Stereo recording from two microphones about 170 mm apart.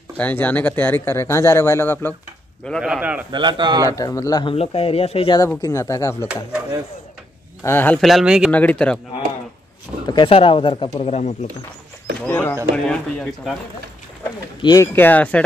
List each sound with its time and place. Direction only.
0.2 s speech: 10° left (ahead or behind)
2.6 s speech: centre (ahead or behind)
3.3 s a man's voice: 25° right (ahead or behind)
3.9 s speech: 20° left (ahead or behind)
4.6 s speech: 35° left (ahead or behind)
5.6 s speech: 15° left (ahead or behind)
7.6 s speech: 10° left (ahead or behind); by 8.5 s 5° right (ahead or behind)
8.5 s speech: 10° left (ahead or behind)
10.0 s speech: 30° left (ahead or behind)
12.3 s speech: 10° left (ahead or behind)
14.6 s speech: 25° left (ahead or behind)
14.9 s speech: 10° left (ahead or behind)